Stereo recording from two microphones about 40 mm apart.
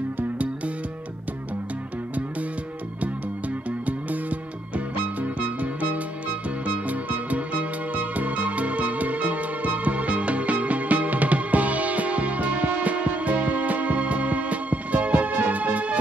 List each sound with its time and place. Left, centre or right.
3.0 s music: right